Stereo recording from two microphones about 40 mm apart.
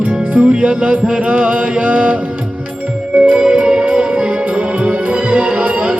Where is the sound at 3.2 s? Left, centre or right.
Centre.